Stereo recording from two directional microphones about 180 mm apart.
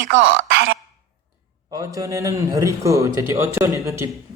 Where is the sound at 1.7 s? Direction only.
20° right (ahead or behind).